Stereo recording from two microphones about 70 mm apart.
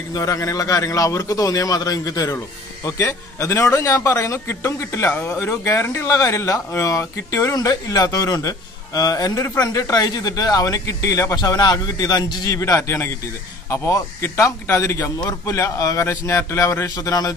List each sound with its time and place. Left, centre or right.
0.2 s a man's voice: left
3.0 s a man's voice: left
6.0 s a man's voice: left
7.5 s a man's voice: left
11.3 s a man's voice: left
12.5 s a man's voice: left
15.1 s a man's voice: left
16.9 s a man's voice: left